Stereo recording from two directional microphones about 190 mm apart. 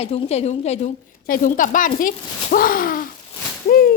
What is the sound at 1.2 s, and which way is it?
Speech, 45° left (ahead or behind).